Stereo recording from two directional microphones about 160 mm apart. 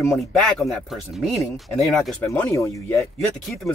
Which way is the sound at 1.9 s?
Centre (ahead or behind).